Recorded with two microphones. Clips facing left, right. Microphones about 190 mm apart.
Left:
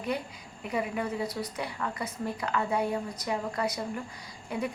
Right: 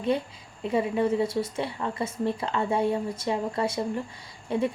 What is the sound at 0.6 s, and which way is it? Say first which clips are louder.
Speech: right 7 dB; 25° right (ahead or behind).